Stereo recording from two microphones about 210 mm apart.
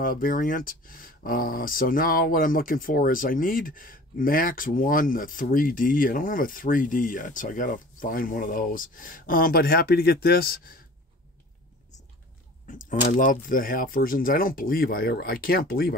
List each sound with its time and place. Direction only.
0.0 s speech: 40° left (ahead or behind)
12.6 s speech: 40° left (ahead or behind)